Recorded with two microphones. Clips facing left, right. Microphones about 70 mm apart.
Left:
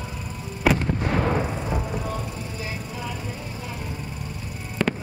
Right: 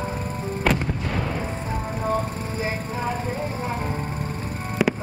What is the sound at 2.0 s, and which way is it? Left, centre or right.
Vehicle, right.